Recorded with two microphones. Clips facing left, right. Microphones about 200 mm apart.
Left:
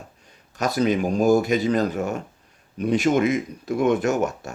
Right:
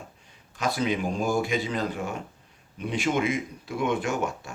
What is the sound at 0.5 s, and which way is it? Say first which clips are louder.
A man's voice: left 5 dB; 40° left (ahead or behind).